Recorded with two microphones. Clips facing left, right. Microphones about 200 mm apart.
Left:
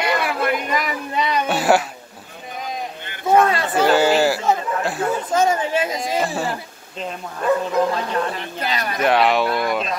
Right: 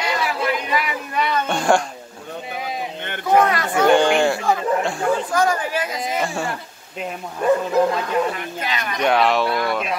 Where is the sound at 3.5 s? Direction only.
25° left (ahead or behind).